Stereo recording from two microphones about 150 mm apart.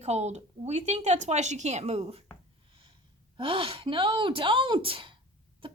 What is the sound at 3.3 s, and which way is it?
A woman's voice, 35° right (ahead or behind).